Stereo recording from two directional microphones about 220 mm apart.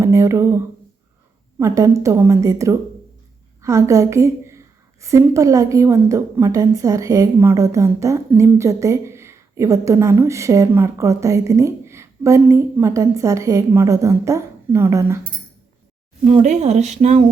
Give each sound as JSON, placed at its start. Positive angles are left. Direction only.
{"t": 0.0, "sound": "a woman's voice", "side_deg": -15}
{"t": 16.2, "sound": "a woman's voice", "side_deg": -30}